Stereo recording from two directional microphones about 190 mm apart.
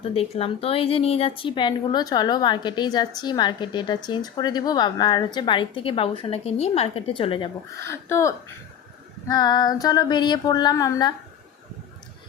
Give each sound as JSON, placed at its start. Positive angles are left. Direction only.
{"t": 0.1, "sound": "a woman's voice", "side_deg": 30}
{"t": 7.9, "sound": "a woman's voice", "side_deg": 15}